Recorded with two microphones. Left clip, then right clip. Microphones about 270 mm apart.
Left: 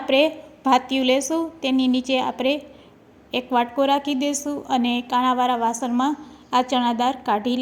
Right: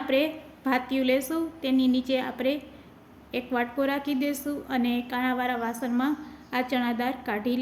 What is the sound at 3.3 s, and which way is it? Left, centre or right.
A woman's voice, left.